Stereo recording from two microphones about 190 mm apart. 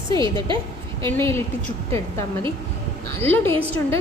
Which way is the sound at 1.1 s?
15° left (ahead or behind).